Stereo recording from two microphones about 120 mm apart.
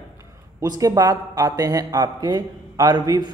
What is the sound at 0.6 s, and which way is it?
A man's voice, 30° right (ahead or behind).